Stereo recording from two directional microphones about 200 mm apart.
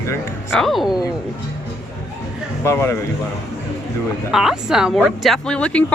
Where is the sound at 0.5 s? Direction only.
Centre (ahead or behind).